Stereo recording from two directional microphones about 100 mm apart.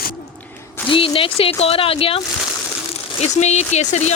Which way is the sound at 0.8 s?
65° left (ahead or behind).